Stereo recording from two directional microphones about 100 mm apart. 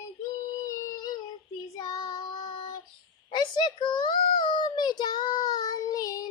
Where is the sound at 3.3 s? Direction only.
50° left (ahead or behind).